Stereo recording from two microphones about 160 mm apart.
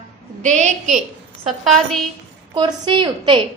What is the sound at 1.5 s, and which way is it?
Speech, centre (ahead or behind).